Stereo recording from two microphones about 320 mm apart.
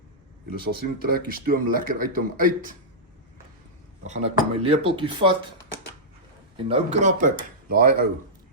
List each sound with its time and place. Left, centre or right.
0.6 s speech: right
4.0 s speech: right
6.7 s speech: centre